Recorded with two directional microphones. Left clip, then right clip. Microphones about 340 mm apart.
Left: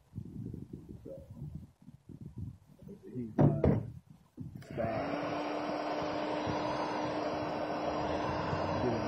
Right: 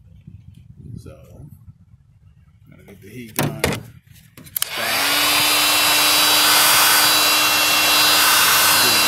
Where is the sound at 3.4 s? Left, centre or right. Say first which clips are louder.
Right 8 dB; right.